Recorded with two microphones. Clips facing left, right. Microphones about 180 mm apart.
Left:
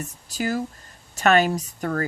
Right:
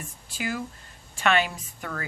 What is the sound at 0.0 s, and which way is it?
Speech, 40° left (ahead or behind).